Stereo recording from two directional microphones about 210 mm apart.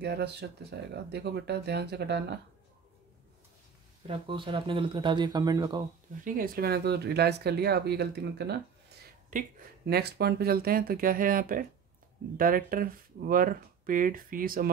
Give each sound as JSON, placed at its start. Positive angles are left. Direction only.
{"t": 0.0, "sound": "speech", "side_deg": -55}
{"t": 4.1, "sound": "speech", "side_deg": -25}
{"t": 6.2, "sound": "speech", "side_deg": -45}